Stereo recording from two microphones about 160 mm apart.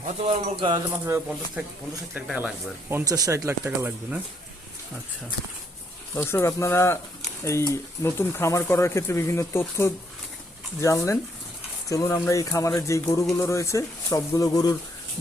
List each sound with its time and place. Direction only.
0.2 s speech: 40° right (ahead or behind)
1.0 s speech: 15° right (ahead or behind)
2.9 s speech: 20° right (ahead or behind)
6.1 s speech: 15° left (ahead or behind)